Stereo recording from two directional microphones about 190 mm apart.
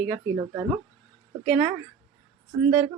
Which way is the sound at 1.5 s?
5° right (ahead or behind).